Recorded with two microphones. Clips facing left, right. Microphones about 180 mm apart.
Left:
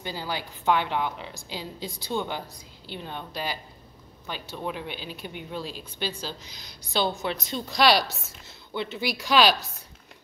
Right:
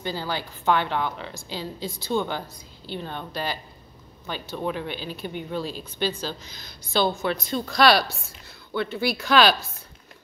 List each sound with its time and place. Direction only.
0.0 s a woman's voice: 10° left (ahead or behind)
5.6 s speech: 40° right (ahead or behind)
5.9 s a woman's voice: 10° left (ahead or behind)